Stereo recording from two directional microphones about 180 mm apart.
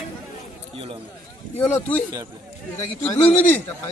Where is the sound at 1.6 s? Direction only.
10° left (ahead or behind).